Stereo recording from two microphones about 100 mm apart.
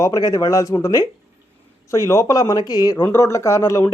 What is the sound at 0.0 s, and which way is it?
Speech, 40° left (ahead or behind).